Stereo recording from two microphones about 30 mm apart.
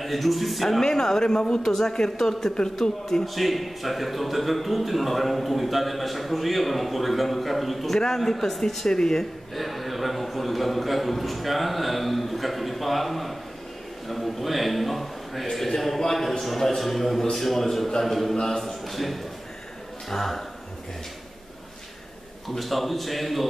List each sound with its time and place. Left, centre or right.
0.0 s a man's voice: centre
0.8 s speech: centre
1.6 s a man's voice: centre
1.9 s a man's voice: left
3.3 s a man's voice: centre
9.6 s a man's voice: centre
18.3 s speech: left
18.6 s a man's voice: centre
22.6 s a man's voice: centre